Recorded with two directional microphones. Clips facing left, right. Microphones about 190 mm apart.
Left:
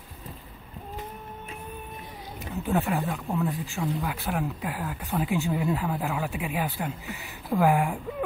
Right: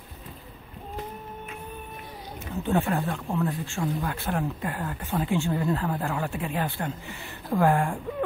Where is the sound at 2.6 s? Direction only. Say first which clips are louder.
Right 1 dB; 5° left (ahead or behind).